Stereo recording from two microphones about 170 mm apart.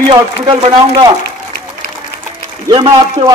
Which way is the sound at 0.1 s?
35° right (ahead or behind).